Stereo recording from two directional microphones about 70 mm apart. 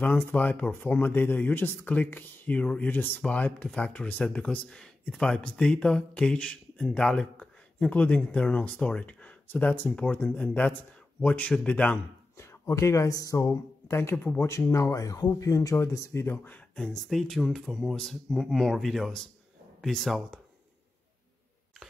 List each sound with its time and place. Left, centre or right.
0.0 s speech: left
12.4 s speech: left
14.7 s speech: left
16.7 s speech: centre